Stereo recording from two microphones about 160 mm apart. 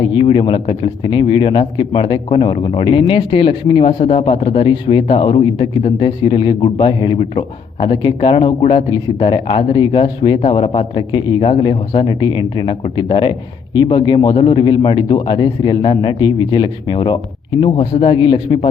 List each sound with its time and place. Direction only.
0.0 s a man's voice: 30° left (ahead or behind)